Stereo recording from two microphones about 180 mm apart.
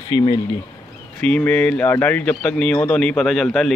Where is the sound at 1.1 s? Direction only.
5° left (ahead or behind).